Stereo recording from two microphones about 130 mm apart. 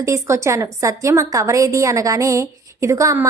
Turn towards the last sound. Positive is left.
turn(degrees=-25)  # may be behind; listen again after turning